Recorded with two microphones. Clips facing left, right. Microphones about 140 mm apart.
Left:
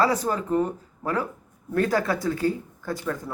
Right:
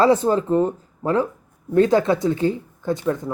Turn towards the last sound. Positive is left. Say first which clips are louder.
# right 7 dB
turn(degrees=-20)  # may be behind; listen again after turning